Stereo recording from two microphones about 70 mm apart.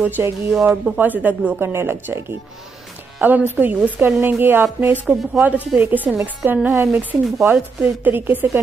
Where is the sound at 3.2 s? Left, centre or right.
Right.